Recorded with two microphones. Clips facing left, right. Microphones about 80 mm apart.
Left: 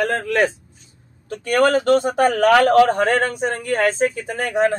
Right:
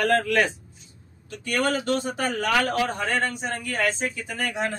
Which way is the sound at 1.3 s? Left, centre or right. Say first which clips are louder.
Left 9 dB; left.